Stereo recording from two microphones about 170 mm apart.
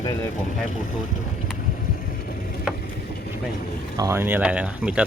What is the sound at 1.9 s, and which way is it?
Vehicle, 55° left (ahead or behind).